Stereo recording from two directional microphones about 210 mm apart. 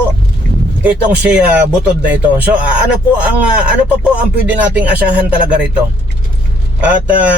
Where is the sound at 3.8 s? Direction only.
5° right (ahead or behind).